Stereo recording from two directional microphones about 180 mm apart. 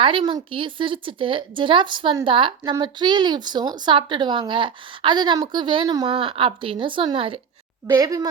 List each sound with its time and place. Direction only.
0.0 s a woman's voice: 30° right (ahead or behind)